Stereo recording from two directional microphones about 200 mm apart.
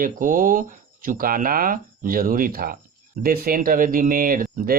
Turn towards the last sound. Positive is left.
turn(degrees=-45)  # may be behind; listen again after turning